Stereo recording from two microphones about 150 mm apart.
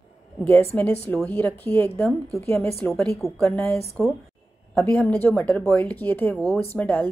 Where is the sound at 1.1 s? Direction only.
10° left (ahead or behind).